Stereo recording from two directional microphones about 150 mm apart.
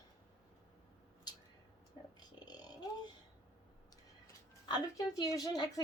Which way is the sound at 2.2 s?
30° left (ahead or behind).